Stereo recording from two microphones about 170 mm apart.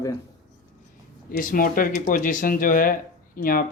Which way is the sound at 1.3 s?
55° left (ahead or behind).